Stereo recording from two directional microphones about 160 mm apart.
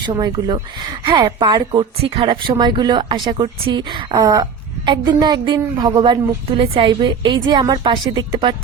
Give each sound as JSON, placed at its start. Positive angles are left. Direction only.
{"t": 0.2, "sound": "speech", "side_deg": -30}